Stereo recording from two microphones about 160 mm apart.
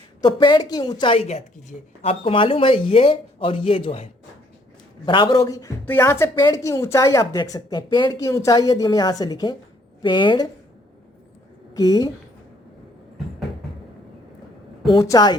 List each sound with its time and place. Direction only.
0.2 s a woman's voice: 25° left (ahead or behind)
11.7 s a woman's voice: 20° left (ahead or behind)
14.8 s a woman's voice: 20° left (ahead or behind)